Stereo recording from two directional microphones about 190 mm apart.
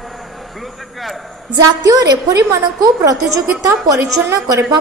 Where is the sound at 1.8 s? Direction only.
20° right (ahead or behind).